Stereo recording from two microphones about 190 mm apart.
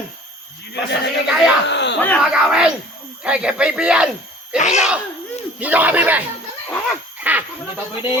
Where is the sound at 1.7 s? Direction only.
65° left (ahead or behind).